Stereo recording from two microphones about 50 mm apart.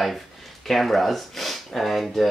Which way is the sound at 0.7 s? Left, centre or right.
Centre.